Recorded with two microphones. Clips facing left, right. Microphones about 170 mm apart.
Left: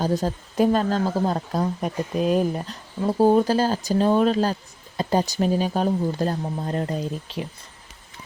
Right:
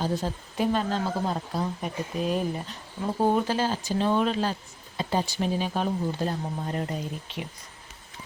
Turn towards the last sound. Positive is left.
turn(degrees=35)  # may be behind; listen again after turning